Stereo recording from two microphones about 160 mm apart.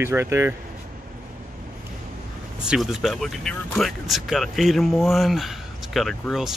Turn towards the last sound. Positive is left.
turn(degrees=0)  # may be behind; listen again after turning